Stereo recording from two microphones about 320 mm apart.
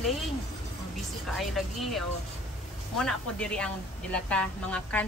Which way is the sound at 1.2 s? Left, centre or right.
Centre.